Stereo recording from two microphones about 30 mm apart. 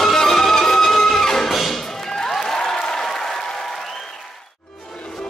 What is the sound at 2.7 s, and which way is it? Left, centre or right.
Applause, centre.